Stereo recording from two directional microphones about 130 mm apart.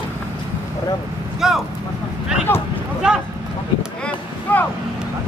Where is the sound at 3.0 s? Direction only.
5° right (ahead or behind).